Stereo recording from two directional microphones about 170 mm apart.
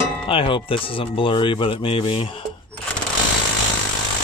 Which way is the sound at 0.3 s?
30° left (ahead or behind).